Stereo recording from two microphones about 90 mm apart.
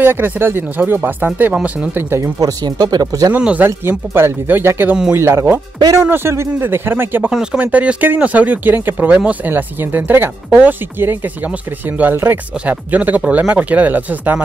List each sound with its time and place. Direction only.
0.0 s speech: 20° right (ahead or behind)
1.5 s speech: 10° right (ahead or behind)
2.0 s speech: 25° right (ahead or behind)
2.3 s speech: 45° right (ahead or behind)
3.3 s speech: 15° right (ahead or behind)
7.2 s speech: 10° right (ahead or behind)